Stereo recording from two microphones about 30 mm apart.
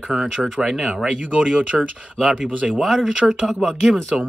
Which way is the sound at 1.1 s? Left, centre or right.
Right.